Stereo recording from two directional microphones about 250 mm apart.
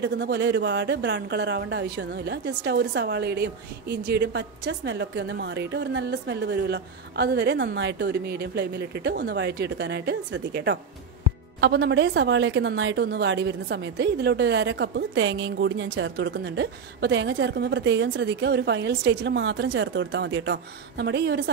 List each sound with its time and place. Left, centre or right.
0.0 s a woman's voice: right